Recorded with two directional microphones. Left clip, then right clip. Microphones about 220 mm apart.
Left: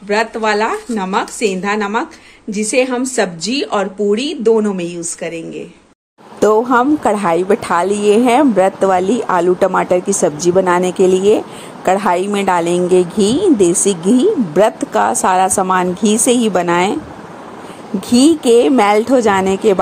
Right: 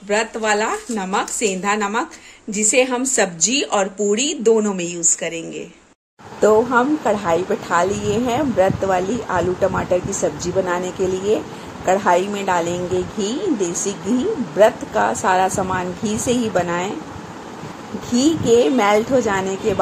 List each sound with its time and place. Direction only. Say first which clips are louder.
0.1 s a woman's voice: left 4 dB; centre (ahead or behind)
6.4 s a woman's voice: left 3 dB; 45° left (ahead or behind)
18.1 s a woman's voice: left 5 dB; 45° left (ahead or behind)